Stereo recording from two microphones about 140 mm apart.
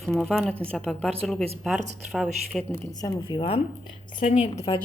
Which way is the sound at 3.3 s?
40° left (ahead or behind).